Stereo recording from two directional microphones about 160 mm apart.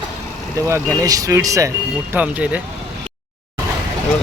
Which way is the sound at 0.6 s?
20° right (ahead or behind).